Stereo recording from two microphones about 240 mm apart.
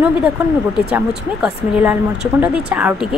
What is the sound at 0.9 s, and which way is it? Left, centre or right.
A woman's voice, centre.